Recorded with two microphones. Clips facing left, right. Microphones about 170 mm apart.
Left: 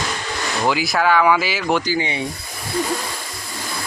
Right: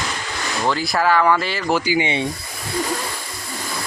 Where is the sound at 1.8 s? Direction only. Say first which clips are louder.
Right 2 dB; 15° right (ahead or behind).